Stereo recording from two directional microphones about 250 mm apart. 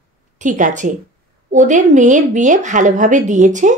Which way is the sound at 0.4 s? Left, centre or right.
Right.